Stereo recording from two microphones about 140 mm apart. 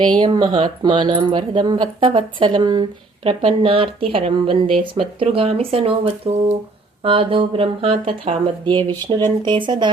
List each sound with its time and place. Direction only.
0.0 s speech: 35° right (ahead or behind)